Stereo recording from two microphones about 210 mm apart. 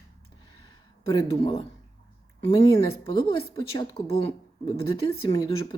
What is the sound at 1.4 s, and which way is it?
Speech, 25° left (ahead or behind).